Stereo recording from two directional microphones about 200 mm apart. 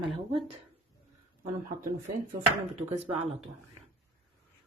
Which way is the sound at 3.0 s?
30° right (ahead or behind).